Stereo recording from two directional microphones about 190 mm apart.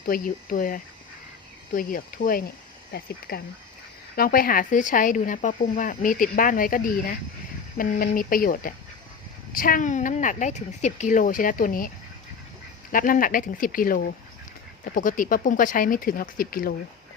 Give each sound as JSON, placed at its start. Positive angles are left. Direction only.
{"t": 0.0, "sound": "speech", "side_deg": 50}
{"t": 12.9, "sound": "speech", "side_deg": 45}